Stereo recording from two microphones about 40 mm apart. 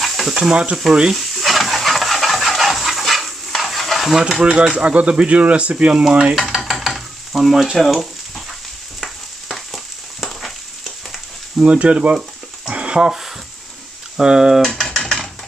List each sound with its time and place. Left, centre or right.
0.0 s frying: centre
0.4 s speech: right
1.1 s stir: centre
4.4 s speech: centre
6.3 s stir: centre
7.7 s speech: centre
9.0 s frying: centre
11.5 s speech: right
12.6 s dog: right
13.0 s speech: centre
14.6 s typing: centre